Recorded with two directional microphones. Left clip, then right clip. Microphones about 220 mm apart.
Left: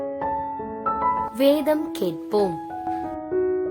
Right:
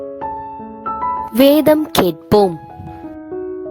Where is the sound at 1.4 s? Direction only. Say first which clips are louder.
Right 11 dB; 50° right (ahead or behind).